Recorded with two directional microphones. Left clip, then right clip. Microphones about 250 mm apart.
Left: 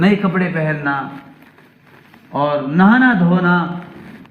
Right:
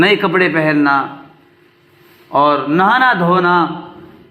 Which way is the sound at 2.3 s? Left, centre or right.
Right.